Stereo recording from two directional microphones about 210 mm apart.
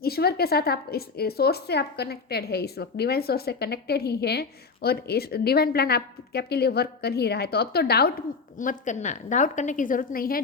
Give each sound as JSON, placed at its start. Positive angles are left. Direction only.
{"t": 0.0, "sound": "speech", "side_deg": 50}
{"t": 8.5, "sound": "a woman's voice", "side_deg": 35}